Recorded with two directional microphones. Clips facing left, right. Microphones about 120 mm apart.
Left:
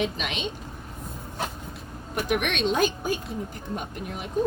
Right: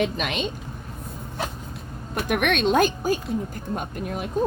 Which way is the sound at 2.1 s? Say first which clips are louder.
Right 3 dB; 55° right (ahead or behind).